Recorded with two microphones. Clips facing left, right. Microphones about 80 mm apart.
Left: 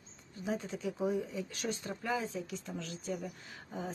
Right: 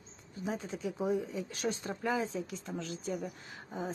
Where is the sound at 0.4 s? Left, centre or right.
Right.